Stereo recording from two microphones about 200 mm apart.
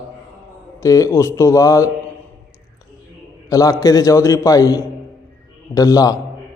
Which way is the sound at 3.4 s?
15° left (ahead or behind).